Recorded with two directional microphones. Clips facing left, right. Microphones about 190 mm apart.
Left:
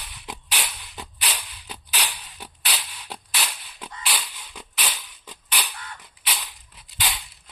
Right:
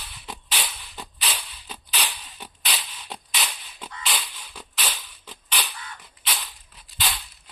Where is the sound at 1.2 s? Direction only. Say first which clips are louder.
Even; 10° left (ahead or behind).